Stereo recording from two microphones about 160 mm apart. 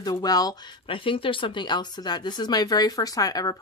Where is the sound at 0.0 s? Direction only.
25° left (ahead or behind).